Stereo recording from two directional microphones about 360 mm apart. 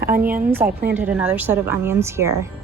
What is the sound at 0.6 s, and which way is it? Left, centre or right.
Speech, right.